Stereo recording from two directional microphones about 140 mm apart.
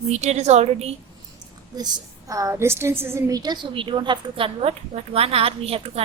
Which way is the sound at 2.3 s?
25° right (ahead or behind).